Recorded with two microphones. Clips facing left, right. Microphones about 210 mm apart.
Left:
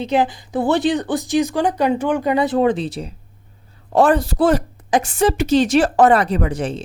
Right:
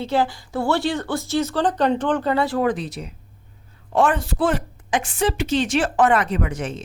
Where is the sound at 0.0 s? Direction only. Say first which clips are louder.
Left 3 dB; 20° left (ahead or behind).